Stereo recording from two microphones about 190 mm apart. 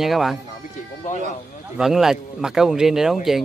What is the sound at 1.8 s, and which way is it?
Speech, centre (ahead or behind).